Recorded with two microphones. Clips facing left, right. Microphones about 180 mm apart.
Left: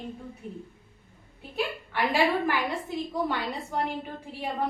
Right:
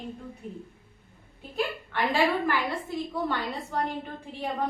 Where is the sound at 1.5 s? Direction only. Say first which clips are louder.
Even; 10° left (ahead or behind).